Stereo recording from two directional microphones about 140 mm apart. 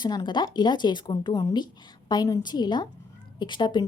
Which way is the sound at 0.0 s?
30° left (ahead or behind).